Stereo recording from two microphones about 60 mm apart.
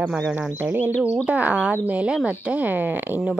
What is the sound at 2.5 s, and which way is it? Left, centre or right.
Speech, right.